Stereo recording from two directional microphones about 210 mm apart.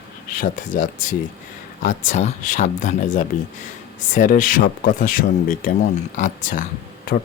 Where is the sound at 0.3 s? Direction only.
40° left (ahead or behind).